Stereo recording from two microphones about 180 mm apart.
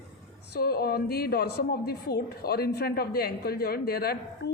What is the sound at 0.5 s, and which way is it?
A woman's voice, 60° left (ahead or behind).